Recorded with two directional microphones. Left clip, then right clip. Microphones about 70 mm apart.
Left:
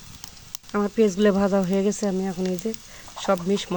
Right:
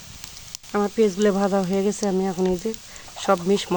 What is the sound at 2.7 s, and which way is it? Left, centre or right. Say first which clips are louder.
Speech: right 2 dB; right.